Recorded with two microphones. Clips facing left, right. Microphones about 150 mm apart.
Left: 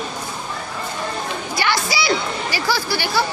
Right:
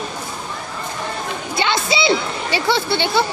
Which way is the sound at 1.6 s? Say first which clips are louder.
Right 3 dB; 25° right (ahead or behind).